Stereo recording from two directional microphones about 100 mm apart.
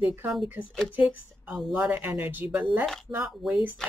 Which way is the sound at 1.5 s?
10° right (ahead or behind).